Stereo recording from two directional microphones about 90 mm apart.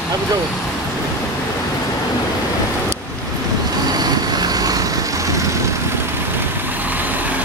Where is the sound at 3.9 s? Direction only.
50° right (ahead or behind).